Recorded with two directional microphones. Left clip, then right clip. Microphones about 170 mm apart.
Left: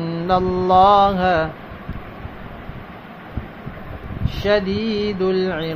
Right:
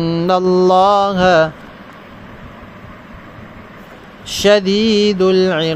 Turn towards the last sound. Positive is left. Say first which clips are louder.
# right 7 dB
turn(degrees=-45)  # may be behind; listen again after turning